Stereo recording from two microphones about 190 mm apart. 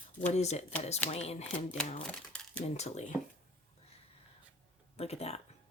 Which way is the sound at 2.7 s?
35° left (ahead or behind).